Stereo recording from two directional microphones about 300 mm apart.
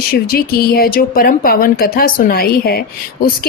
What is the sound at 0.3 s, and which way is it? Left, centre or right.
Speech, left.